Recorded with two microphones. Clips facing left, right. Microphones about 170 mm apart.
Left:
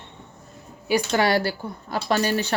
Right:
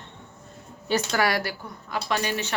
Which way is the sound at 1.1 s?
25° left (ahead or behind).